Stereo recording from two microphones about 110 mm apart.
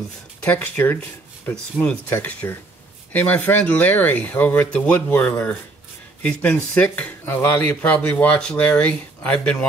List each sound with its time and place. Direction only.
0.4 s speech: 10° left (ahead or behind)
2.1 s speech: 25° left (ahead or behind)